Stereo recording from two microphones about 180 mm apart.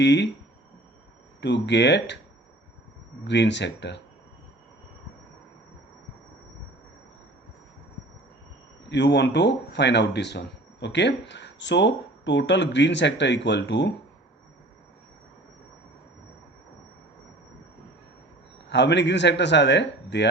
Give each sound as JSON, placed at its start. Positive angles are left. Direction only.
{"t": 0.0, "sound": "speech", "side_deg": 75}
{"t": 1.4, "sound": "speech", "side_deg": 75}
{"t": 3.2, "sound": "speech", "side_deg": 75}
{"t": 8.9, "sound": "speech", "side_deg": 75}
{"t": 18.7, "sound": "speech", "side_deg": 75}